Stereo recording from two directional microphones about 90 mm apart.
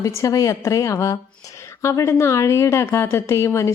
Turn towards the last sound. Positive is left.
turn(degrees=30)  # may be behind; listen again after turning